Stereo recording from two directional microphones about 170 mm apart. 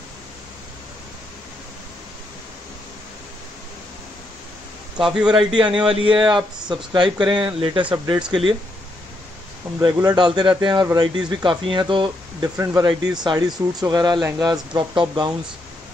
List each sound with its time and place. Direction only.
4.9 s speech: 5° right (ahead or behind)
5.5 s speech: 30° right (ahead or behind)
9.8 s speech: 25° right (ahead or behind)